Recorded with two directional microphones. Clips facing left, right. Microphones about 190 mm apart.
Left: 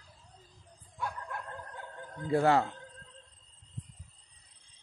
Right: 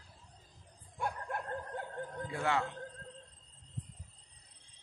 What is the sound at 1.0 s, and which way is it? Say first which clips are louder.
Dog: right 1 dB; 50° right (ahead or behind).